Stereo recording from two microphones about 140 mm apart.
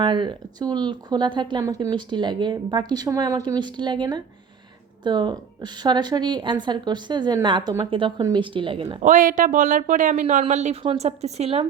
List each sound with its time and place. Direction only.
0.0 s speech: 35° right (ahead or behind)
9.0 s speech: 65° right (ahead or behind)
10.5 s a woman's voice: 55° right (ahead or behind)